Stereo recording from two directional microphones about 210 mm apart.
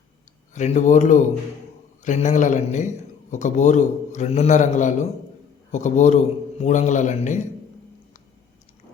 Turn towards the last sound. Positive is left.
turn(degrees=35)  # may be behind; listen again after turning